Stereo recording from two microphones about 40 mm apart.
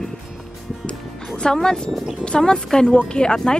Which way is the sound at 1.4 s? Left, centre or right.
Centre.